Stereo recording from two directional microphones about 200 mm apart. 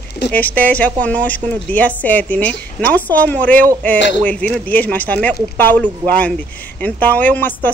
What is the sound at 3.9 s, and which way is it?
Speech, 60° left (ahead or behind).